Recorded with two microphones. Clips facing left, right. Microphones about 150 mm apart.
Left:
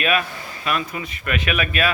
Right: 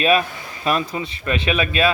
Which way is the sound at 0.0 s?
30° right (ahead or behind).